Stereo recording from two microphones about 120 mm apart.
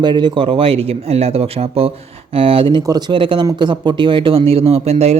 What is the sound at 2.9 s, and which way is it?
A man's voice, 35° right (ahead or behind).